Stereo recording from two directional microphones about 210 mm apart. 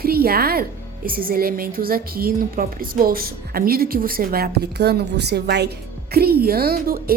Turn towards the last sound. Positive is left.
turn(degrees=-45)  # may be behind; listen again after turning